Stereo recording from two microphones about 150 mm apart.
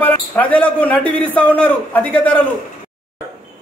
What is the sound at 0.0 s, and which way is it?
A man's voice, 10° left (ahead or behind).